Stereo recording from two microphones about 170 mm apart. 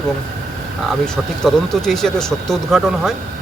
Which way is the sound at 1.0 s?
5° left (ahead or behind).